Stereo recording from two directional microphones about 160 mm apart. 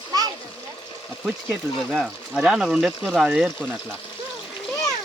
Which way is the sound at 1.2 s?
Centre (ahead or behind).